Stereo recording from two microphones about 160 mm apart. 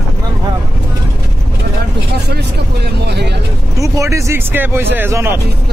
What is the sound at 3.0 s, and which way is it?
Vehicle, 90° right.